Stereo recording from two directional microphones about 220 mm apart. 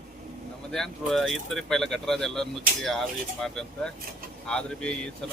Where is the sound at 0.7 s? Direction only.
Centre (ahead or behind).